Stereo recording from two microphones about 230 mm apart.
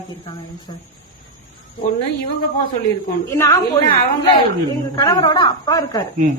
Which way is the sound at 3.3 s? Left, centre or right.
Centre.